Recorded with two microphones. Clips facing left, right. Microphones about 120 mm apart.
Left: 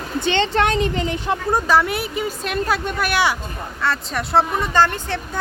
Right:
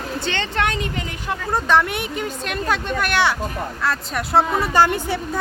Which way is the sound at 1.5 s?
5° left (ahead or behind).